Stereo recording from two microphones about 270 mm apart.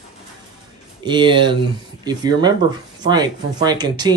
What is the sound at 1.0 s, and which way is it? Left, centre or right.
Speech, centre.